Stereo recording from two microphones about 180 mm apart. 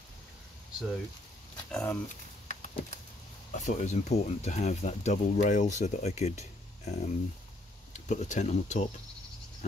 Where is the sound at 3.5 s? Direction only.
40° left (ahead or behind).